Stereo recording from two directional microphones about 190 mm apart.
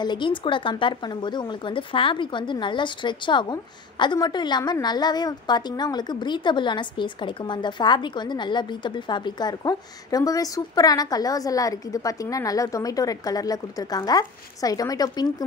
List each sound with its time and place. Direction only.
0.0 s a woman's voice: 25° left (ahead or behind)